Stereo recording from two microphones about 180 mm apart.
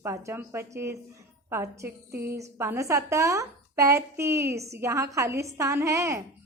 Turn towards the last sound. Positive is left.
turn(degrees=-15)  # may be behind; listen again after turning